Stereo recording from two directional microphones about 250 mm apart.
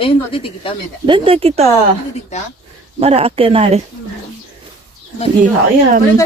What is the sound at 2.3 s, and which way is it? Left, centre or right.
Speech, left.